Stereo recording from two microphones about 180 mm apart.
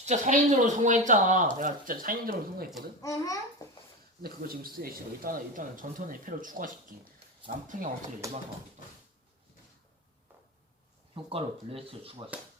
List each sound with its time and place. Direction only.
0.0 s speech: 40° right (ahead or behind)
3.0 s a child's voice: 15° left (ahead or behind)
4.2 s speech: 55° right (ahead or behind)
11.1 s speech: 30° right (ahead or behind)